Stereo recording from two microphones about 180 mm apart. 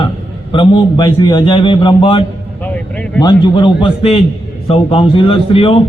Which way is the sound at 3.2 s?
25° left (ahead or behind).